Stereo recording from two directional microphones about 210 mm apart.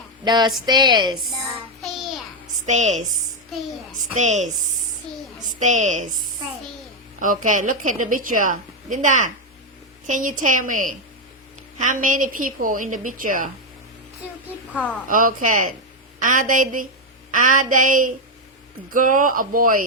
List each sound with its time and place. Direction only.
0.3 s a woman's voice: 20° right (ahead or behind)
2.6 s a woman's voice: 35° right (ahead or behind)
5.5 s a woman's voice: 35° right (ahead or behind)
7.2 s a woman's voice: 40° right (ahead or behind)
15.0 s a woman's voice: 40° right (ahead or behind)